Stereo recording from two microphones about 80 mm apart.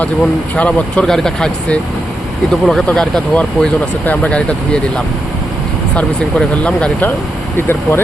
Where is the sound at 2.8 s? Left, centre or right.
Centre.